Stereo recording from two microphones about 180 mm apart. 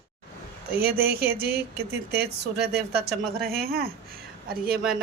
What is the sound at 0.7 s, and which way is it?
Speech, 60° right (ahead or behind).